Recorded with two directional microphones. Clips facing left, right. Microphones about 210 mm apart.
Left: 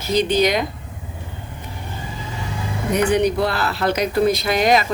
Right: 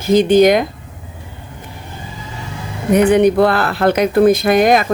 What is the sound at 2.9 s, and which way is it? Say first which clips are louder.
Speech: right 7 dB; 55° right (ahead or behind).